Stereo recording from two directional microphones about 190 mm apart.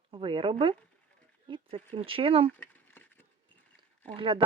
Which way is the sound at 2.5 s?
10° left (ahead or behind).